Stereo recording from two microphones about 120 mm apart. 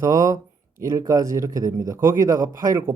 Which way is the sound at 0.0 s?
25° right (ahead or behind).